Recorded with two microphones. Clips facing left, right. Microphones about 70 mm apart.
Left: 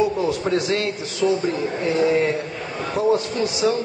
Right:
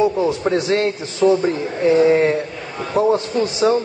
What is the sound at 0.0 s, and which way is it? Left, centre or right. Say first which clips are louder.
A man's voice: right 3 dB; right.